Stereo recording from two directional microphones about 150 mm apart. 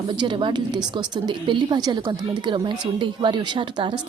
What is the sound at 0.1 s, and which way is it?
A woman's voice, 30° right (ahead or behind).